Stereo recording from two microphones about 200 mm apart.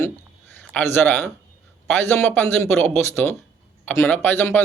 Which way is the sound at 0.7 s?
10° left (ahead or behind).